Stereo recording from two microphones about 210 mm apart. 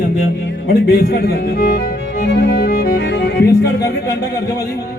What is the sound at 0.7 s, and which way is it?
Speech, 50° left (ahead or behind).